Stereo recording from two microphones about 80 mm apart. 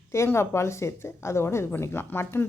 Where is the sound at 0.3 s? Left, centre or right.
Left.